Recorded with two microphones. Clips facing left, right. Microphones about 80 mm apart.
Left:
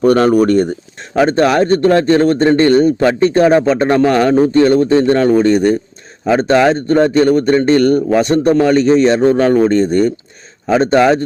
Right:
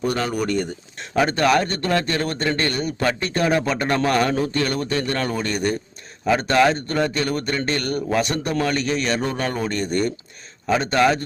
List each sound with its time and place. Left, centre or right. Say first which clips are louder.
0.0 s speech: left 13 dB; left
1.2 s a man's voice: left 7 dB; left